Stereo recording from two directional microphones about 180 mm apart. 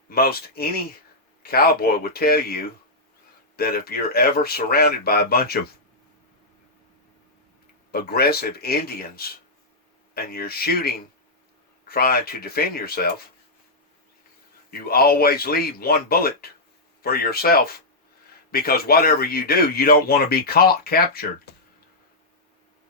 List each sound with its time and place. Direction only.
0.1 s speech: 60° left (ahead or behind)
7.9 s speech: 60° left (ahead or behind)
14.7 s speech: 55° left (ahead or behind)